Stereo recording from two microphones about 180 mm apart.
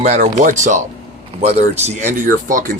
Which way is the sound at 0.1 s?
40° right (ahead or behind).